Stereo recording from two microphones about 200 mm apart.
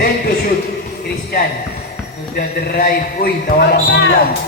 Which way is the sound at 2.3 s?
50° left (ahead or behind).